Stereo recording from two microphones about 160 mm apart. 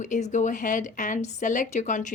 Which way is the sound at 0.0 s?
50° left (ahead or behind).